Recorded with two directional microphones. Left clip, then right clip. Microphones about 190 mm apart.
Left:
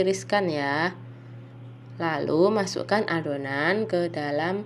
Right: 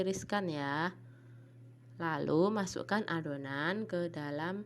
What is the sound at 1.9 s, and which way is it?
A woman's voice, 55° right (ahead or behind).